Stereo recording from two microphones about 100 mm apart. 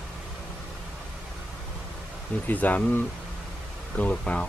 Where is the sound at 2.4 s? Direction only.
15° left (ahead or behind).